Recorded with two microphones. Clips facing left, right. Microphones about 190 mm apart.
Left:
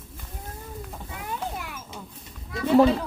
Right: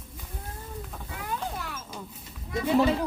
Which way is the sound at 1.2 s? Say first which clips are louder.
Left 1 dB; 15° left (ahead or behind).